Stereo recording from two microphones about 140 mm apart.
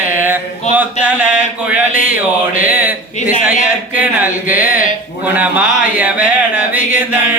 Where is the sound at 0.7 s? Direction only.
55° left (ahead or behind).